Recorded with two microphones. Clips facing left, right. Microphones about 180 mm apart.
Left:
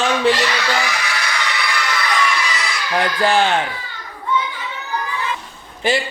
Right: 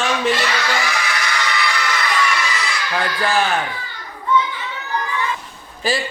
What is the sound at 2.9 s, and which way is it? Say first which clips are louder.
Speech: left 3 dB; 30° left (ahead or behind).